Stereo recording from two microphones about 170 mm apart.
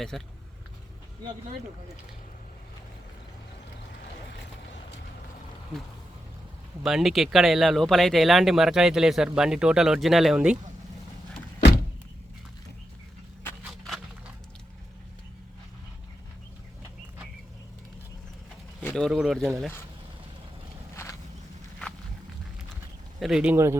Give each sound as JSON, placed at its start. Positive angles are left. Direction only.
{"t": 0.1, "sound": "speech", "side_deg": 0}
{"t": 6.8, "sound": "speech", "side_deg": 0}
{"t": 13.6, "sound": "a sound", "side_deg": 0}
{"t": 18.8, "sound": "bird", "side_deg": 10}
{"t": 19.0, "sound": "speech", "side_deg": -5}
{"t": 20.9, "sound": "walk", "side_deg": 15}
{"t": 23.2, "sound": "speech", "side_deg": -5}